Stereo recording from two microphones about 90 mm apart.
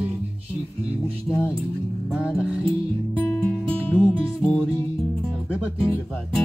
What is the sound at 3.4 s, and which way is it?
Music, 15° left (ahead or behind).